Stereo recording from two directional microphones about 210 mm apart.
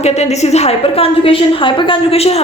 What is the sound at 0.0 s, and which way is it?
A woman's voice, 30° left (ahead or behind).